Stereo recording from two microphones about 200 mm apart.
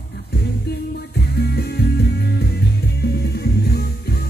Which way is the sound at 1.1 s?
55° left (ahead or behind).